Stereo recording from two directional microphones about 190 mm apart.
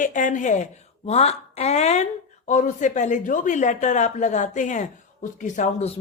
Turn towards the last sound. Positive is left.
turn(degrees=40)  # may be behind; listen again after turning